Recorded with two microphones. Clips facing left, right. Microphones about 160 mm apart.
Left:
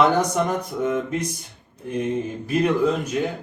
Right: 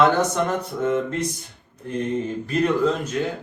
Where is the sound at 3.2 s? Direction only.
20° left (ahead or behind).